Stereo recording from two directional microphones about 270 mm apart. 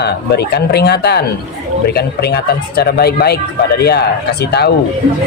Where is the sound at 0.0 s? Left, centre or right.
Left.